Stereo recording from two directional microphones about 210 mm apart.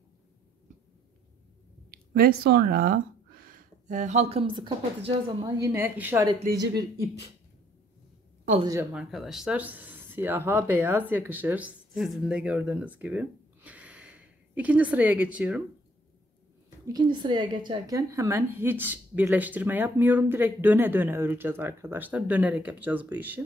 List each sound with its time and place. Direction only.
2.1 s speech: 45° right (ahead or behind); by 5.5 s 20° right (ahead or behind)
5.7 s speech: 10° right (ahead or behind)
6.5 s speech: 40° right (ahead or behind)
8.9 s speech: centre (ahead or behind)
16.8 s speech: 20° right (ahead or behind)